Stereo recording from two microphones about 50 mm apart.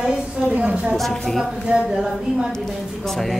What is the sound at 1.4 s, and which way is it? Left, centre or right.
Speech, centre.